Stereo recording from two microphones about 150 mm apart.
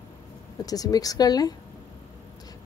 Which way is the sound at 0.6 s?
25° left (ahead or behind).